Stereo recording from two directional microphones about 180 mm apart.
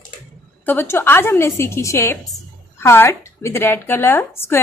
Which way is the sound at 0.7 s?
10° left (ahead or behind).